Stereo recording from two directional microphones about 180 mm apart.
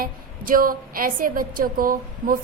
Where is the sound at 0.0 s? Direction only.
50° right (ahead or behind).